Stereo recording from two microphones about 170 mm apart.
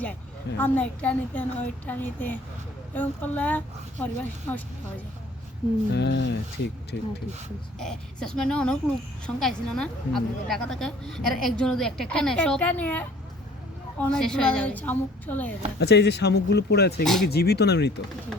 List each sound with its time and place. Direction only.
0.6 s a woman's voice: 10° left (ahead or behind)
5.9 s speech: 80° left
7.8 s a woman's voice: 5° left (ahead or behind)
15.8 s speech: 80° left
17.0 s a woman's voice: centre (ahead or behind)
17.2 s speech: 70° left (ahead or behind)